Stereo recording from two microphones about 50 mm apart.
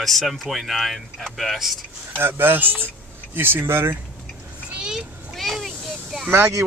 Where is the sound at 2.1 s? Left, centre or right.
Right.